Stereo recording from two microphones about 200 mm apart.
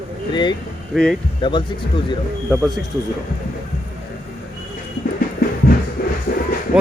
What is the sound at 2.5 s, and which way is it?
Speech, 15° right (ahead or behind).